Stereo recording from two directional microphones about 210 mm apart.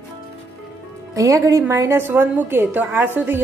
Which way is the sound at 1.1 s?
15° right (ahead or behind).